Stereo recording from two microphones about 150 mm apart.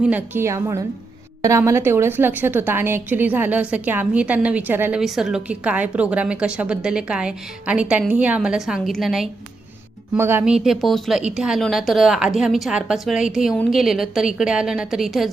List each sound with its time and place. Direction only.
0.0 s a woman's voice: 10° right (ahead or behind)
10.2 s a woman's voice: 15° right (ahead or behind)